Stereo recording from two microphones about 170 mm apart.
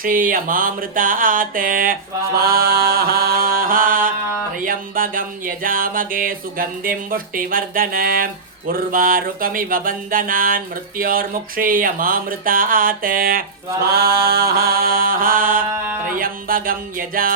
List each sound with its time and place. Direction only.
0.0 s music: 55° right (ahead or behind)